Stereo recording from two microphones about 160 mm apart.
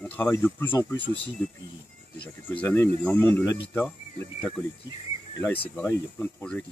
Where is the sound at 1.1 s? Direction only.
30° right (ahead or behind).